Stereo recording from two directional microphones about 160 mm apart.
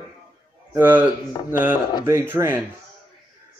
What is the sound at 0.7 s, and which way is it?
A man's voice, 10° right (ahead or behind).